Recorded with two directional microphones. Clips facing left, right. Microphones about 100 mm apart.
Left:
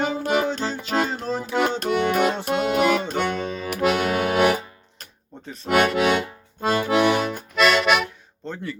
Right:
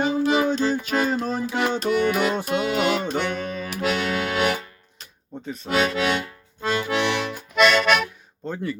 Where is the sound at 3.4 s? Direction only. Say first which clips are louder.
Left 1 dB; 25° left (ahead or behind).